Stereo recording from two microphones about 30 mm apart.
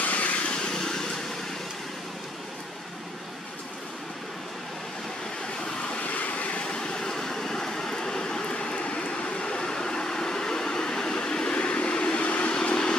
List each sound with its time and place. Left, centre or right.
0.0 s vehicle: left
0.6 s vehicle: left
6.0 s vehicle: left
6.8 s vehicle: left
8.5 s vehicle: left
11.5 s vehicle: left
12.2 s vehicle: left
12.6 s vehicle: left